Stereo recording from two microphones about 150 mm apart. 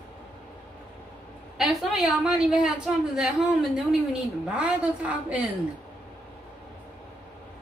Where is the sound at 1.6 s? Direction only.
Centre (ahead or behind).